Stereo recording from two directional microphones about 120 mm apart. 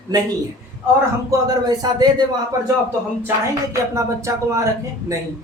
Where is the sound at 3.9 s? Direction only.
25° right (ahead or behind).